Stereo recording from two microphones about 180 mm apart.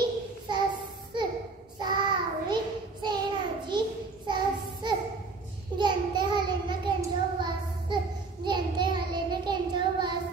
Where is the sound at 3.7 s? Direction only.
25° right (ahead or behind).